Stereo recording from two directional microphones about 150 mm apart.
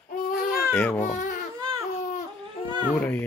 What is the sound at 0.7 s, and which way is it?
Speech, 10° left (ahead or behind).